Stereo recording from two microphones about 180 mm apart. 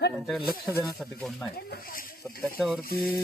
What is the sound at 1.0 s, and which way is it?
Speech, centre (ahead or behind).